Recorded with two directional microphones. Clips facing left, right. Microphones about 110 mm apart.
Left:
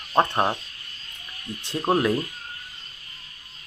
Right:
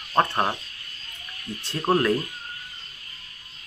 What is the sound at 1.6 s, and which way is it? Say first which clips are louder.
Speech: even; 15° left (ahead or behind).